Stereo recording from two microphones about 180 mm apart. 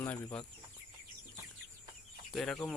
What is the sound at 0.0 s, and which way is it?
Speech, 15° left (ahead or behind).